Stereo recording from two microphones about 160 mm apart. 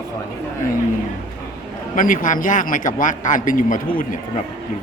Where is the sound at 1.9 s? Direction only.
55° left (ahead or behind).